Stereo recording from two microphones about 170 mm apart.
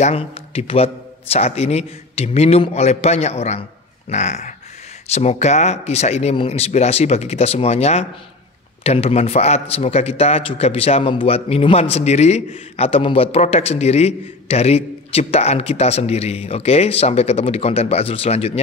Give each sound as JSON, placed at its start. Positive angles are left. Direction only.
{"t": 0.0, "sound": "a man's voice", "side_deg": 35}
{"t": 4.1, "sound": "a sound", "side_deg": 40}
{"t": 5.1, "sound": "a man's voice", "side_deg": 40}